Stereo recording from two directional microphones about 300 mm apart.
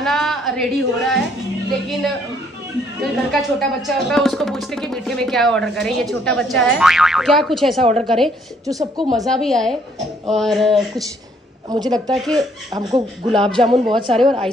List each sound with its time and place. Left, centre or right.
0.0 s a sound: centre
3.0 s speech: centre
7.8 s speech: centre
9.1 s speech: centre
11.7 s speech: centre